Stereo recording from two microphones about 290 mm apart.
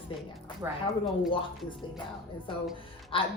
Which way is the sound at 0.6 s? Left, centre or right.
Centre.